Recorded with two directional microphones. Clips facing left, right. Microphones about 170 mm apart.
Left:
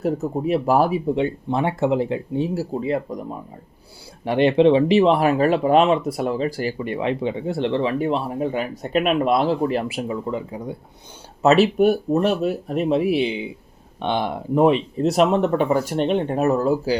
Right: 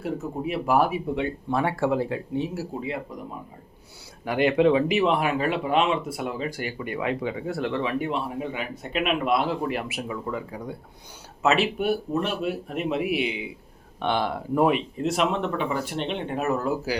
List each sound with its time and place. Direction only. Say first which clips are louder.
0.0 s speech: left 6 dB; 40° left (ahead or behind)
4.3 s speech: left 5 dB; 25° left (ahead or behind)
11.4 s speech: left 7 dB; 40° left (ahead or behind)
14.0 s speech: left 2 dB; 20° left (ahead or behind)
14.9 s speech: left 7 dB; 40° left (ahead or behind)